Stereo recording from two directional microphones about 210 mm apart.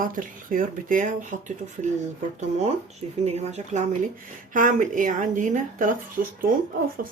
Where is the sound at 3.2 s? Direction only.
30° right (ahead or behind).